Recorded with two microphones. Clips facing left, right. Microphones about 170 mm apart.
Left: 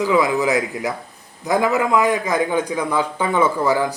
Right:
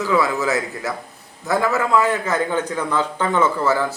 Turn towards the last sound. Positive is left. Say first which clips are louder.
# left 1 dB
turn(degrees=15)  # may be behind; listen again after turning